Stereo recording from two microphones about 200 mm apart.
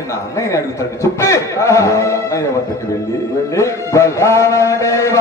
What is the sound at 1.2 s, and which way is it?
Speech, 15° left (ahead or behind).